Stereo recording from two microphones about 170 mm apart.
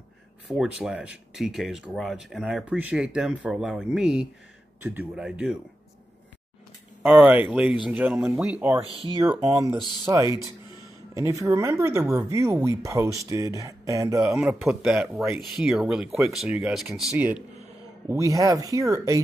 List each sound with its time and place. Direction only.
0.5 s speech: 5° right (ahead or behind)
7.0 s speech: 10° right (ahead or behind)
14.3 s speech: 5° right (ahead or behind)
18.0 s speech: 20° right (ahead or behind)